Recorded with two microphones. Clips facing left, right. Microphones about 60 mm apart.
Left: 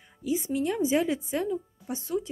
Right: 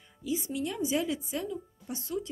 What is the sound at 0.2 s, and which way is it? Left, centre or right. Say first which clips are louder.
Speech: left 4 dB; left.